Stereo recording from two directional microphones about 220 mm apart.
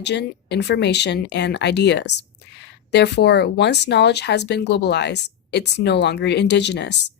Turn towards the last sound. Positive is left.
turn(degrees=50)  # may be behind; listen again after turning